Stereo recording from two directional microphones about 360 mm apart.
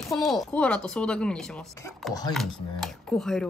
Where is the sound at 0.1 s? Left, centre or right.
Centre.